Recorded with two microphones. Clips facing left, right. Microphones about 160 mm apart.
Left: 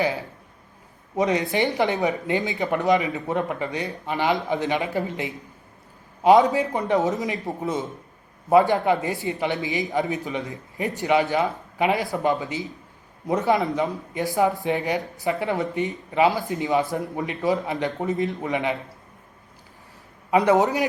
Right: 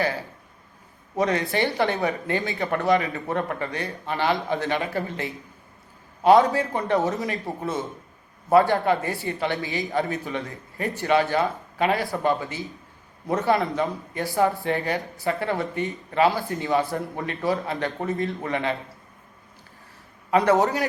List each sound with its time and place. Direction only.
0.0 s a man's voice: 20° left (ahead or behind)
20.3 s a man's voice: 20° left (ahead or behind)